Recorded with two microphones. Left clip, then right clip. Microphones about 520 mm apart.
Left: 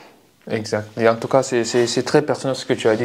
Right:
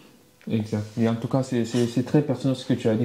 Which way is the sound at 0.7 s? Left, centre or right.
Centre.